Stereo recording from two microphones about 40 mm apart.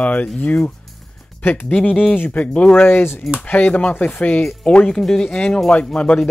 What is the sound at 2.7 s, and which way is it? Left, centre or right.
Speech, left.